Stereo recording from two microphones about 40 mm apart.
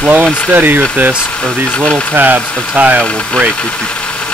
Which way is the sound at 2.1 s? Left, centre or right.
Right.